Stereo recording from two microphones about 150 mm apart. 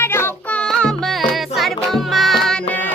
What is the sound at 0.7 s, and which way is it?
Music, 5° left (ahead or behind).